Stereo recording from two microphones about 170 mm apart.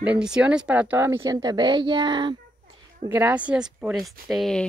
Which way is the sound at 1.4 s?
25° right (ahead or behind).